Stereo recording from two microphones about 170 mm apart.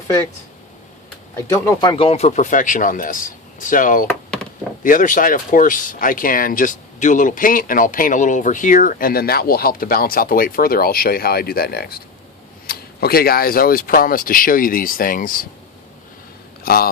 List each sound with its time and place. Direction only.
1.4 s speech: 20° left (ahead or behind); by 15.4 s 55° left (ahead or behind)
16.6 s speech: 60° left (ahead or behind)